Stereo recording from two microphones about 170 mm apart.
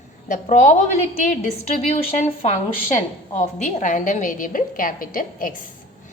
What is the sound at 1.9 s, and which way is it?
A woman's voice, 40° left (ahead or behind).